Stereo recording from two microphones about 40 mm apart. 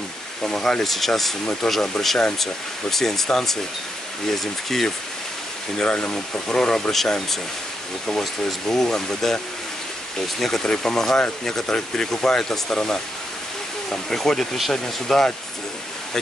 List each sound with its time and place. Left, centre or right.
0.4 s speech: centre
5.8 s speech: left
6.4 s speech: centre
8.6 s speech: centre